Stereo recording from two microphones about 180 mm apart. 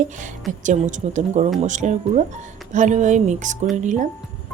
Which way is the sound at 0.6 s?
45° right (ahead or behind).